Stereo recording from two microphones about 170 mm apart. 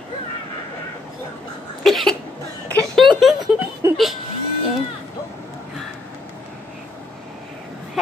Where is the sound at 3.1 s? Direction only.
Centre (ahead or behind).